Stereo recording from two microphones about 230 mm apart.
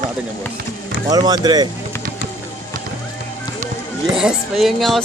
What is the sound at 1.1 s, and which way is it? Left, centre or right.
Speech, centre.